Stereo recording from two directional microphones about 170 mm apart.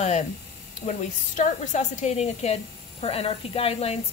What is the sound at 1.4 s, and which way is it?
Speech, 45° left (ahead or behind).